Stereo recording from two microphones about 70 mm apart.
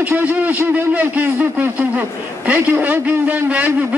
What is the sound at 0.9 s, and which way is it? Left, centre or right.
A man's voice, right.